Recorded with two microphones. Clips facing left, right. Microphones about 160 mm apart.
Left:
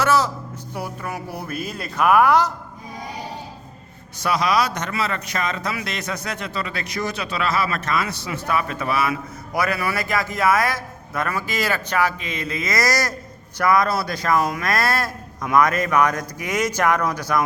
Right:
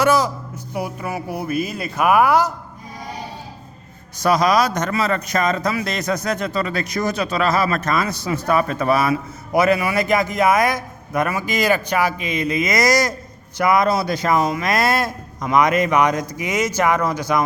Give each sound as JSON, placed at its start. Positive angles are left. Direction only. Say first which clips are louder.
{"t": 0.0, "sound": "a man's voice", "louder": "right 2 dB", "side_deg": -15}
{"t": 4.2, "sound": "speech", "louder": "right 4 dB", "side_deg": -40}
{"t": 9.5, "sound": "a man's voice", "louder": "right 6 dB", "side_deg": -20}